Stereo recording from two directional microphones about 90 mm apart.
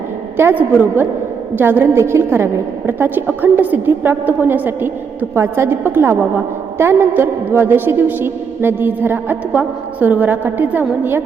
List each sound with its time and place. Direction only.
0.3 s a woman's voice: 20° right (ahead or behind)